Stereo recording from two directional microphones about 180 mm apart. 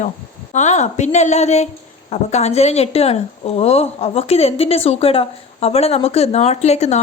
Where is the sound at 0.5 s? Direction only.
40° left (ahead or behind).